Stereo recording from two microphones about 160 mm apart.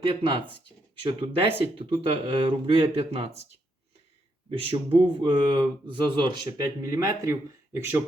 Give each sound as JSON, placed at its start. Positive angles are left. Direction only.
{"t": 0.1, "sound": "speech", "side_deg": -30}
{"t": 4.4, "sound": "speech", "side_deg": -35}